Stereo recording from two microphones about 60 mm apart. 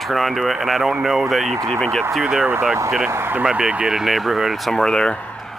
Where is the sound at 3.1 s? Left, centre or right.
Right.